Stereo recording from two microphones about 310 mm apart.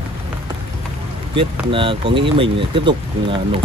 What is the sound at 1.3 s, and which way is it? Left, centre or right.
Speech, centre.